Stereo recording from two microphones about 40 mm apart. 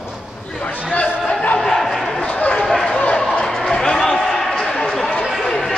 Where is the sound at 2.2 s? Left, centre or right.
Left.